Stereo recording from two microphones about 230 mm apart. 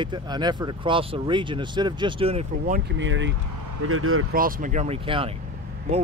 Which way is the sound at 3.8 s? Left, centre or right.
Right.